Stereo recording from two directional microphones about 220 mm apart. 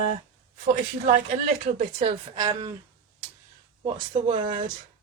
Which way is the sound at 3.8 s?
25° right (ahead or behind).